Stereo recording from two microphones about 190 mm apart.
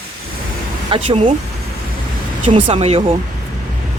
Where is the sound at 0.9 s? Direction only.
30° right (ahead or behind).